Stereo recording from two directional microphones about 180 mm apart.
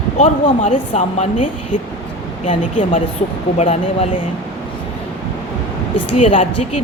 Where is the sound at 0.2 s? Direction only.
40° left (ahead or behind).